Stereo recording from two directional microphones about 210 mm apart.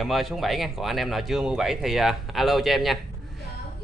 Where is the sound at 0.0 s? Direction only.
Centre (ahead or behind).